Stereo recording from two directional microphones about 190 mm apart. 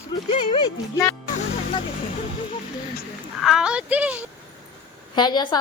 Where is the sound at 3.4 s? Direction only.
5° right (ahead or behind).